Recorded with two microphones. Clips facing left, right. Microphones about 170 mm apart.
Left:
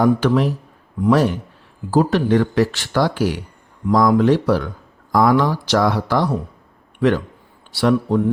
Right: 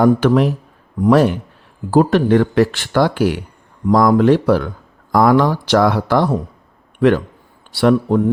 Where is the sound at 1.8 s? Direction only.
55° right (ahead or behind).